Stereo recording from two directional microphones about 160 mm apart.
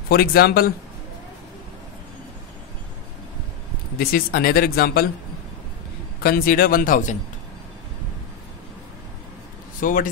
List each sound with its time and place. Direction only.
0.1 s speech: 70° left (ahead or behind)
4.0 s speech: 70° left (ahead or behind)
6.2 s speech: 65° left (ahead or behind)
9.8 s speech: 60° left (ahead or behind)